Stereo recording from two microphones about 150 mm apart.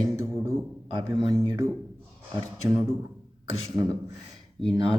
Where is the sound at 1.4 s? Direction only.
20° right (ahead or behind).